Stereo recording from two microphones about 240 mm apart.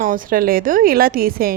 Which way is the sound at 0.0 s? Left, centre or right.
Right.